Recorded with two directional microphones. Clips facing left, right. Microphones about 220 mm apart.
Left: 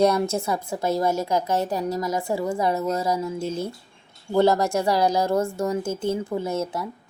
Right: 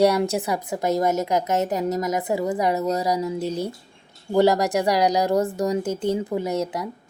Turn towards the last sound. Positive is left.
turn(degrees=-20)  # may be behind; listen again after turning